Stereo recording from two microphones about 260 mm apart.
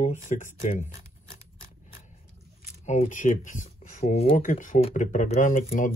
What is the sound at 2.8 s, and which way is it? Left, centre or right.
Speech, left.